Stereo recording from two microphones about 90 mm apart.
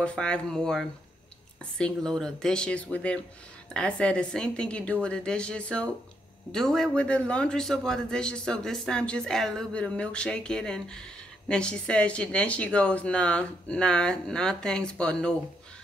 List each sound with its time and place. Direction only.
0.0 s a man's voice: 10° left (ahead or behind)